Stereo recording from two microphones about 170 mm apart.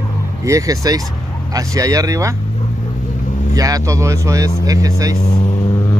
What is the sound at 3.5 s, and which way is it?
Speech, 20° right (ahead or behind).